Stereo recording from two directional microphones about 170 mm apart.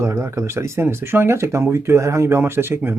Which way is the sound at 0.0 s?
15° right (ahead or behind).